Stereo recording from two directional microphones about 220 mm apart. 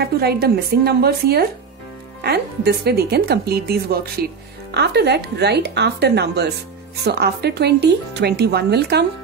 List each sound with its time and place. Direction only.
0.0 s speech: 45° right (ahead or behind)